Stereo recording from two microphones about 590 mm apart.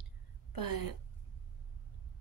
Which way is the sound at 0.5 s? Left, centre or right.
Left.